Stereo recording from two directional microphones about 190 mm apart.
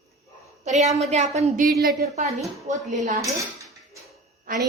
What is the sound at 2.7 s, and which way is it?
Speech, 40° right (ahead or behind).